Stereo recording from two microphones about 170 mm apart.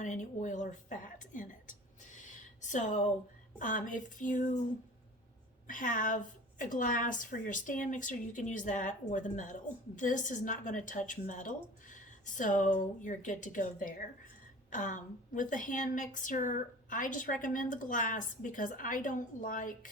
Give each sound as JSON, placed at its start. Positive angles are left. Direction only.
{"t": 0.0, "sound": "a woman's voice", "side_deg": 45}
{"t": 2.1, "sound": "a sound", "side_deg": 45}
{"t": 3.6, "sound": "a woman's voice", "side_deg": 50}
{"t": 5.6, "sound": "a woman's voice", "side_deg": 50}